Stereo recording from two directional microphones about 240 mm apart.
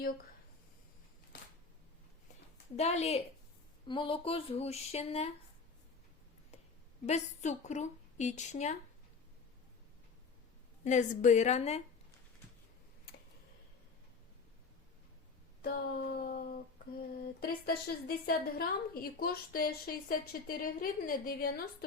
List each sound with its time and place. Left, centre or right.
2.7 s a woman's voice: left
7.0 s a woman's voice: left
10.8 s a woman's voice: left
15.6 s a sound: left
17.4 s a woman's voice: left